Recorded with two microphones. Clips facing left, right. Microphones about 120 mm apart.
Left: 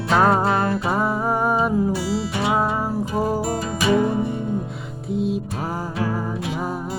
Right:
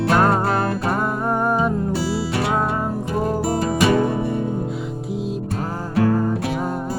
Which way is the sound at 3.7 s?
65° right (ahead or behind).